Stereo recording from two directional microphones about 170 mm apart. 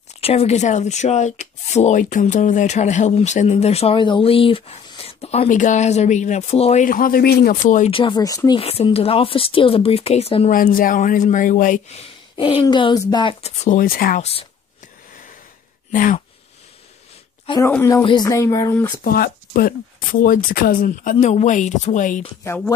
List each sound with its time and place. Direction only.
0.2 s speech: 35° left (ahead or behind); by 7.8 s 65° left (ahead or behind)
7.8 s speech: 30° left (ahead or behind)
8.5 s speech: 35° left (ahead or behind)
10.5 s speech: 55° left (ahead or behind)
12.0 s speech: 30° left (ahead or behind)
13.7 s speech: 55° left (ahead or behind)
15.9 s speech: 50° left (ahead or behind)
17.6 s speech: 15° left (ahead or behind)
19.0 s speech: 55° left (ahead or behind)
22.5 s speech: 15° left (ahead or behind)